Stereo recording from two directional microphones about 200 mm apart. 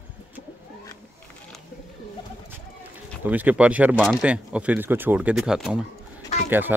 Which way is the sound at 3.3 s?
5° right (ahead or behind).